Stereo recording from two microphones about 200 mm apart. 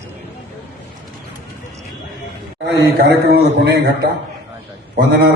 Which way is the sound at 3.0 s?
55° right (ahead or behind).